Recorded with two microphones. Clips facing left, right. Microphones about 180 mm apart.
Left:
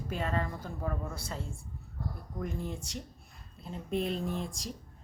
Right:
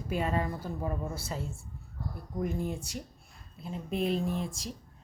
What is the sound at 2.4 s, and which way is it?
A woman's voice, 10° right (ahead or behind).